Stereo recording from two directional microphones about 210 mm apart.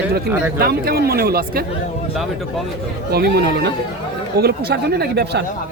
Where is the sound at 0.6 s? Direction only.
45° right (ahead or behind).